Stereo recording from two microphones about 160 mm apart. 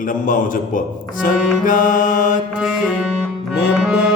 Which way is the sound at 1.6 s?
55° left (ahead or behind).